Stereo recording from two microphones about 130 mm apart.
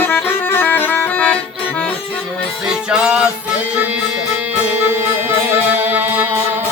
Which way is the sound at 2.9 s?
5° right (ahead or behind).